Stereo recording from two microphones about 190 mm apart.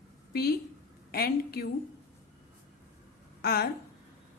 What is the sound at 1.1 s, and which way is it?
Speech, 55° left (ahead or behind).